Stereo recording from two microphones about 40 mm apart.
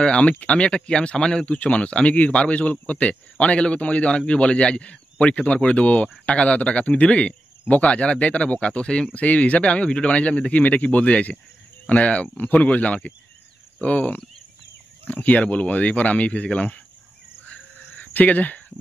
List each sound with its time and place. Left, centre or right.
0.0 s speech: left
1.4 s speech: left
9.1 s speech: left
18.0 s speech: left